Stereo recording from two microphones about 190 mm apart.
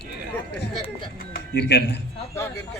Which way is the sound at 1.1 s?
55° left (ahead or behind).